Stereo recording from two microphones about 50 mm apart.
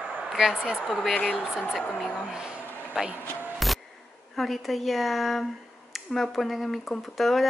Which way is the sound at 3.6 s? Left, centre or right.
Centre.